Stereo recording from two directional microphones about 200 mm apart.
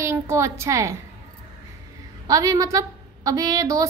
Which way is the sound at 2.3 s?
15° right (ahead or behind).